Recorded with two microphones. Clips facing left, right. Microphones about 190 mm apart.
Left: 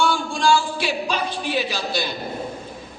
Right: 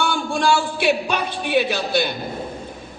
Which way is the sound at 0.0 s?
60° right (ahead or behind).